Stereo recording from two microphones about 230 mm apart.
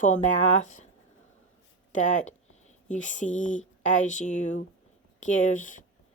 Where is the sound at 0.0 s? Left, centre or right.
Left.